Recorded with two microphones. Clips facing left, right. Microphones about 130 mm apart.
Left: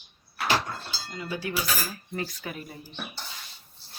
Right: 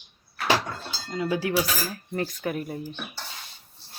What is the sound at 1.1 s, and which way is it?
Speech, 90° right.